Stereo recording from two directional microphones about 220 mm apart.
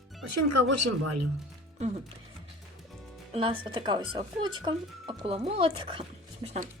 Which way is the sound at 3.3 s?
25° right (ahead or behind).